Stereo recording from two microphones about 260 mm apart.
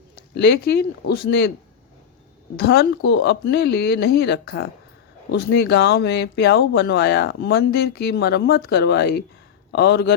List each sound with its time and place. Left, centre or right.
0.3 s speech: left
2.6 s speech: left